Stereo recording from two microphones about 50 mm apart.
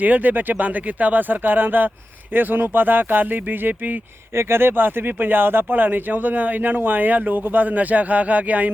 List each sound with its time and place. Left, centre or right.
0.0 s speech: right
4.4 s speech: right